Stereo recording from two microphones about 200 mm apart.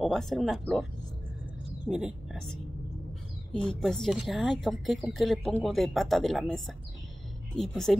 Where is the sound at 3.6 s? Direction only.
Centre (ahead or behind).